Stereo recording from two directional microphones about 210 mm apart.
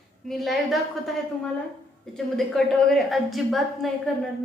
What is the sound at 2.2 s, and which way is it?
A woman's voice, centre (ahead or behind).